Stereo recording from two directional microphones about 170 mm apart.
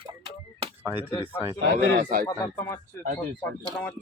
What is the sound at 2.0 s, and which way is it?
Speech, 55° right (ahead or behind).